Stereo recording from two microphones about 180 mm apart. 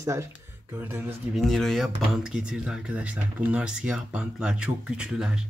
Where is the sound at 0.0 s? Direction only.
15° right (ahead or behind).